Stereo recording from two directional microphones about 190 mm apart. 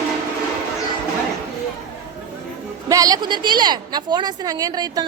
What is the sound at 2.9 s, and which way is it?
A woman's voice, 20° right (ahead or behind).